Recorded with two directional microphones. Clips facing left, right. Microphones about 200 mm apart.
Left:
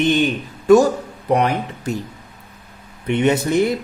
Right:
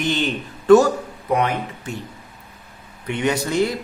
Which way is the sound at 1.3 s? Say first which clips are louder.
Left 3 dB; 35° left (ahead or behind).